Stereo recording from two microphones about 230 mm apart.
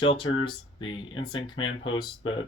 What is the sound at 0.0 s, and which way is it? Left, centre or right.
Speech, left.